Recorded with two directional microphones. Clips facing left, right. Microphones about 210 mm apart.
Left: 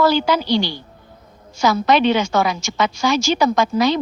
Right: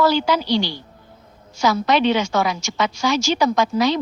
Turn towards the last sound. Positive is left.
turn(degrees=55)  # may be behind; listen again after turning